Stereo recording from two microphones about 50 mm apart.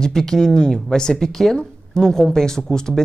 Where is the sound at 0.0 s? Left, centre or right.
Centre.